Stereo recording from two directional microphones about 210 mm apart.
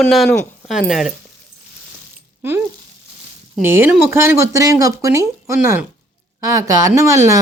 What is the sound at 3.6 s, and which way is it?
Speech, 10° right (ahead or behind).